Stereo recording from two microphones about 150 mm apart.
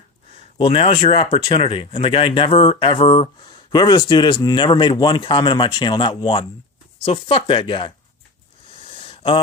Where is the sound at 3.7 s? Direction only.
30° left (ahead or behind).